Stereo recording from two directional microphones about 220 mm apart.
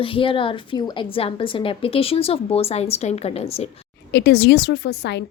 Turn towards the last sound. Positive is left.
turn(degrees=50)  # may be behind; listen again after turning